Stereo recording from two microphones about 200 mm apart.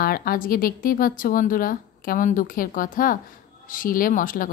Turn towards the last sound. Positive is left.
turn(degrees=45)  # may be behind; listen again after turning